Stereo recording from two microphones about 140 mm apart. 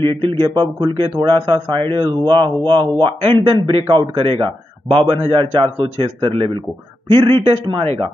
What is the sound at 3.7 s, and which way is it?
Speech, 35° right (ahead or behind).